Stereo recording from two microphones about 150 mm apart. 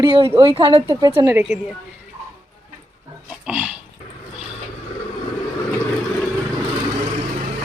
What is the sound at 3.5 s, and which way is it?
Dog, 10° right (ahead or behind).